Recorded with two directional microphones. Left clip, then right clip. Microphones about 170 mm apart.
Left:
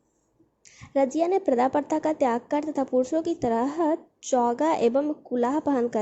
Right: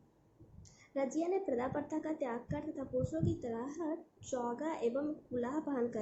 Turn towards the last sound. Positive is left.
turn(degrees=45)  # may be behind; listen again after turning